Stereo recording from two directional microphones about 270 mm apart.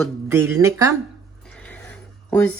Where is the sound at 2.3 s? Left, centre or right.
Centre.